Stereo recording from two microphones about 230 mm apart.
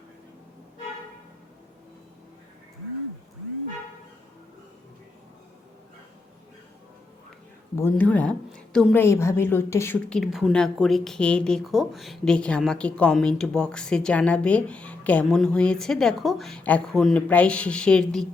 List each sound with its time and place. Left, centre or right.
7.8 s a woman's voice: centre